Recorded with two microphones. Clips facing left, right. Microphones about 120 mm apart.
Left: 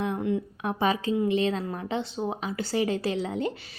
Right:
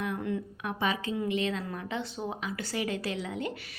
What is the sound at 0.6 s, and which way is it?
A woman's voice, 35° left (ahead or behind).